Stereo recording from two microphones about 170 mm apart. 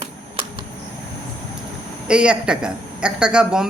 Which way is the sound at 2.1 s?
5° right (ahead or behind).